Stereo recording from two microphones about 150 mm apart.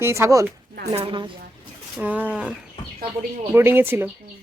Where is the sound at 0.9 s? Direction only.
35° right (ahead or behind).